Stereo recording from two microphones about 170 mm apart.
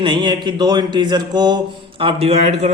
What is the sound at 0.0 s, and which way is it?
Speech, 30° right (ahead or behind).